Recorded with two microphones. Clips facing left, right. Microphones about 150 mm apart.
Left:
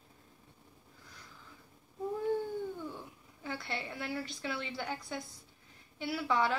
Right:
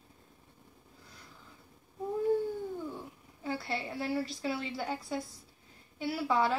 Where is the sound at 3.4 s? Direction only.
30° right (ahead or behind).